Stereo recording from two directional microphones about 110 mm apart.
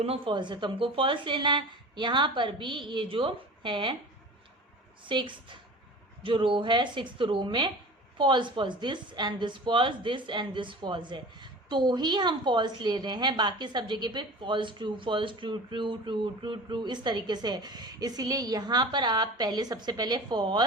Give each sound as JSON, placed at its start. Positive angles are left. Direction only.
{"t": 0.0, "sound": "speech", "side_deg": -65}
{"t": 0.3, "sound": "a woman's voice", "side_deg": -45}
{"t": 5.0, "sound": "a woman's voice", "side_deg": -50}